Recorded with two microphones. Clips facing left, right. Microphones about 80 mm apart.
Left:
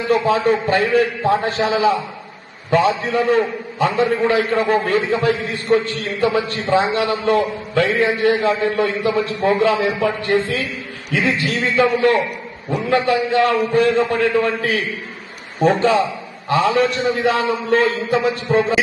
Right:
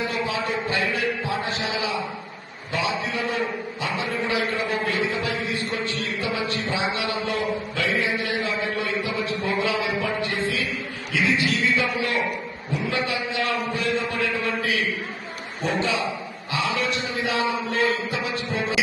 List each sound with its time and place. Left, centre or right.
0.1 s a man's voice: left
8.3 s a man's voice: left